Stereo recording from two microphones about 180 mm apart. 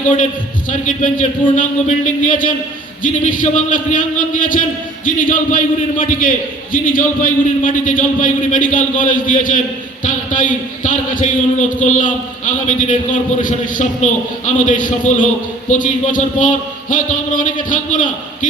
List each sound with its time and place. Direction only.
0.7 s a man's voice: 45° left (ahead or behind)
5.0 s a man's voice: 45° left (ahead or behind)